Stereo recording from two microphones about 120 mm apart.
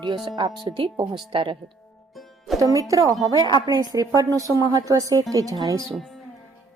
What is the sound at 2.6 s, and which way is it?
A woman's voice, 30° right (ahead or behind).